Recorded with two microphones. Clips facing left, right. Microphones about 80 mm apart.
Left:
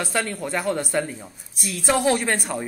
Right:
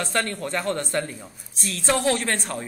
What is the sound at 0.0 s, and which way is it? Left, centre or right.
A woman's voice, centre.